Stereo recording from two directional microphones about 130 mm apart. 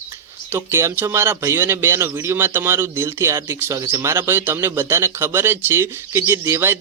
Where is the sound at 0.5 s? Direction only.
20° right (ahead or behind).